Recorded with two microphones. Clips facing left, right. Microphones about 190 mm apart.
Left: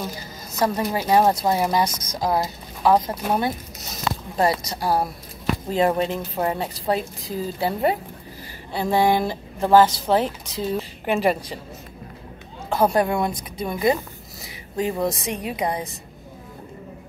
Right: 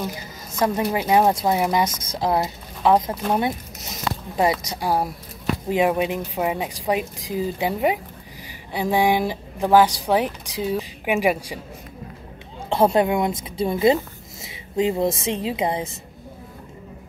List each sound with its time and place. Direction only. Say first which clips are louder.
0.7 s speech: even; 15° right (ahead or behind)
2.9 s speech: right 1 dB; 5° left (ahead or behind)
4.4 s speech: right 1 dB; 15° right (ahead or behind)
12.6 s a woman's voice: right 2 dB; 25° right (ahead or behind)
14.4 s a sound: right 4 dB; 20° right (ahead or behind)
15.2 s a woman's voice: right 2 dB; 25° right (ahead or behind)